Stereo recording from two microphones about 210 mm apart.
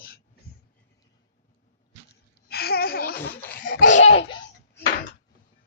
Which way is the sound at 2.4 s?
50° left (ahead or behind).